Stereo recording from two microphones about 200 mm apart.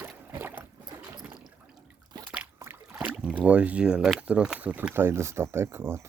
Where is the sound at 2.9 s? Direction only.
5° right (ahead or behind).